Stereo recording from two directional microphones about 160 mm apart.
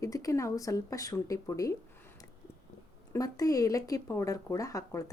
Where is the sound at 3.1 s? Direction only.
20° left (ahead or behind).